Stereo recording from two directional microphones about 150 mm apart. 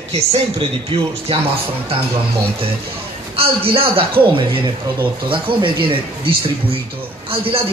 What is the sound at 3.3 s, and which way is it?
A man's voice, 40° right (ahead or behind).